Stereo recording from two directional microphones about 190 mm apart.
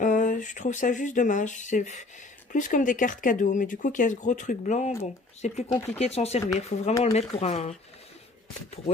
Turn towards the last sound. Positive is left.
turn(degrees=35)  # may be behind; listen again after turning